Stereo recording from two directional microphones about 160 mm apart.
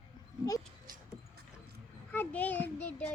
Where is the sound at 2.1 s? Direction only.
10° left (ahead or behind).